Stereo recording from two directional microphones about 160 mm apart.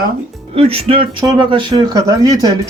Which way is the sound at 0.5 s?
35° right (ahead or behind).